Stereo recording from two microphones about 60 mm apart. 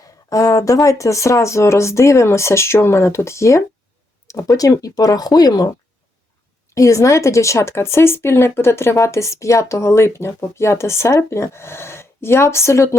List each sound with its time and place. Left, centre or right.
0.0 s speech: left
4.3 s speech: left
6.7 s speech: left